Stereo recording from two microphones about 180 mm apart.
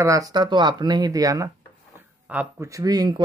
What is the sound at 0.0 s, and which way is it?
Speech, 20° right (ahead or behind).